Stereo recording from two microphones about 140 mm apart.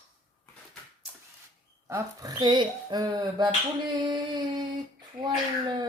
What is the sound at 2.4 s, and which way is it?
Speech, 30° right (ahead or behind).